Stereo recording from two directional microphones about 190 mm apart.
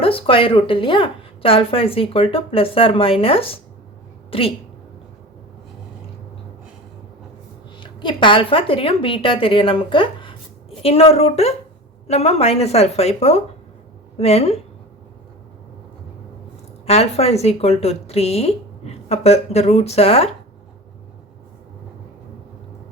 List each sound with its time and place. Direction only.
0.0 s a woman's voice: 30° left (ahead or behind)
7.8 s a woman's voice: 25° left (ahead or behind)
16.8 s a woman's voice: 30° left (ahead or behind)